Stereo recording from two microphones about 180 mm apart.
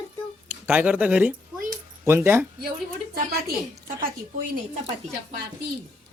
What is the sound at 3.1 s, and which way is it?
Speech, 60° right (ahead or behind).